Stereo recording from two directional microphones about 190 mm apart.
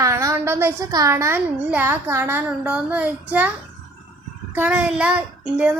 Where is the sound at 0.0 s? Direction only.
15° right (ahead or behind).